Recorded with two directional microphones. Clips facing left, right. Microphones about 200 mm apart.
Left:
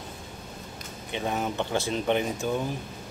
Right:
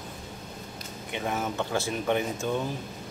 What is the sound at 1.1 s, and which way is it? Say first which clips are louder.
Speech: left 1 dB; 20° left (ahead or behind).